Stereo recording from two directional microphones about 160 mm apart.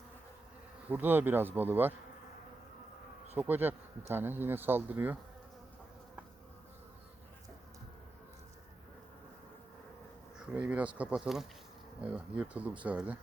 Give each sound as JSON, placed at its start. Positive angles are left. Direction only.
{"t": 0.9, "sound": "speech", "side_deg": -10}
{"t": 3.3, "sound": "speech", "side_deg": -10}
{"t": 10.5, "sound": "speech", "side_deg": -10}